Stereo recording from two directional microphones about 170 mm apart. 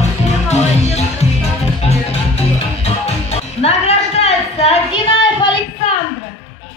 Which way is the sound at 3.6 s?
40° left (ahead or behind).